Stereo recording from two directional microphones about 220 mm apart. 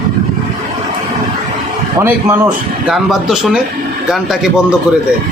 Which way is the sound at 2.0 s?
10° right (ahead or behind).